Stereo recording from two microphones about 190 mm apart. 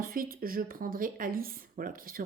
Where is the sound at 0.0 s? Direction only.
50° right (ahead or behind).